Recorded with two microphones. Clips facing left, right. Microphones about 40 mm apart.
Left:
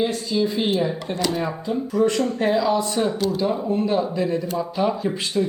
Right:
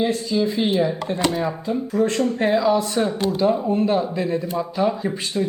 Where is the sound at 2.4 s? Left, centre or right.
Right.